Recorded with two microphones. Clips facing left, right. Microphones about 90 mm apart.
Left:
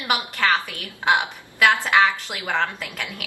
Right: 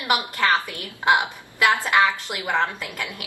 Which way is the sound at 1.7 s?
20° right (ahead or behind).